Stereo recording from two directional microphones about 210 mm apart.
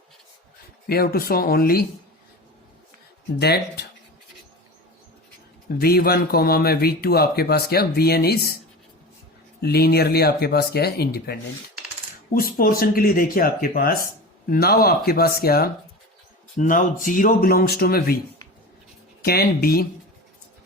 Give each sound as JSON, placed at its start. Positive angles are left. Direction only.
{"t": 0.9, "sound": "speech", "side_deg": 50}
{"t": 3.4, "sound": "speech", "side_deg": 50}
{"t": 5.7, "sound": "speech", "side_deg": 45}
{"t": 9.6, "sound": "speech", "side_deg": 50}
{"t": 19.2, "sound": "speech", "side_deg": 45}